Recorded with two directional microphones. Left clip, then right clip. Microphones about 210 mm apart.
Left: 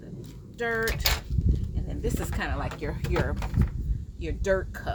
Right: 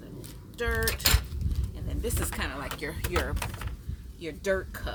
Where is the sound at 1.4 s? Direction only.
15° right (ahead or behind).